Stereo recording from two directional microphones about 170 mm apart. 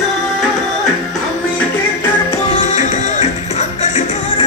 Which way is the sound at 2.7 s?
40° left (ahead or behind).